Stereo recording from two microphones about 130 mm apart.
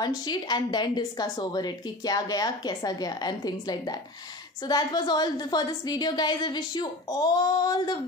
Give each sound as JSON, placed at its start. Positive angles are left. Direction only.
{"t": 0.0, "sound": "a woman's voice", "side_deg": 35}